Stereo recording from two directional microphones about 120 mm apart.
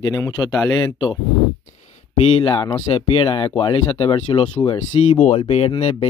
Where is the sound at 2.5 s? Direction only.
40° left (ahead or behind).